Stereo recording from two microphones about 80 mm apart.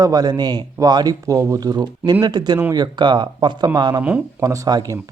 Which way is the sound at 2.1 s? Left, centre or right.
Right.